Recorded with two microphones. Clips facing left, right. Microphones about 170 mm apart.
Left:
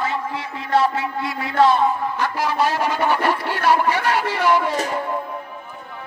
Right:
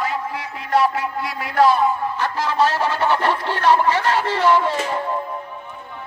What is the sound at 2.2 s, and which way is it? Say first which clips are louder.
Speech: right 2 dB; 15° left (ahead or behind).